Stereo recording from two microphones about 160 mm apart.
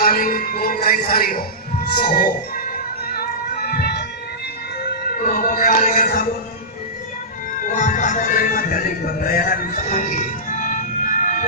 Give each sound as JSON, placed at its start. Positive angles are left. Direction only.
{"t": 0.0, "sound": "music", "side_deg": 65}
{"t": 2.0, "sound": "speech", "side_deg": 75}
{"t": 3.2, "sound": "music", "side_deg": 75}
{"t": 5.2, "sound": "music", "side_deg": 60}
{"t": 7.6, "sound": "speech", "side_deg": 55}